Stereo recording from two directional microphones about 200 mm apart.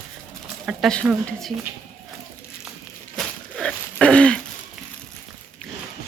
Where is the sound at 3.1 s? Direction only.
Centre (ahead or behind).